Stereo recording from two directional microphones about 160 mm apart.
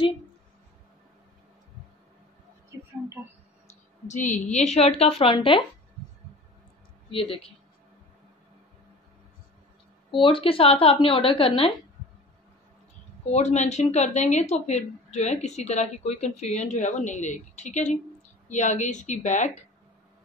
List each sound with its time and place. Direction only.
2.7 s a sound: 20° right (ahead or behind)
4.1 s a woman's voice: 50° left (ahead or behind); by 5.6 s 35° left (ahead or behind)
7.1 s speech: 35° left (ahead or behind)
10.2 s a woman's voice: 35° left (ahead or behind)
13.3 s a woman's voice: 45° left (ahead or behind)